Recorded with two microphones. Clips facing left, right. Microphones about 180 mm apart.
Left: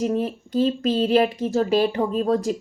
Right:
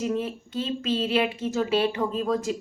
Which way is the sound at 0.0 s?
40° left (ahead or behind).